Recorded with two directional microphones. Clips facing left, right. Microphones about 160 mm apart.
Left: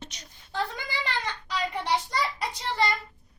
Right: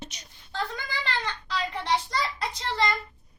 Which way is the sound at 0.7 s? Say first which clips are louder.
Even; 10° left (ahead or behind).